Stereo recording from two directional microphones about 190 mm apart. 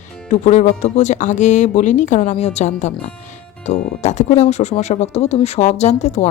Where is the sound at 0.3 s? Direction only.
35° left (ahead or behind).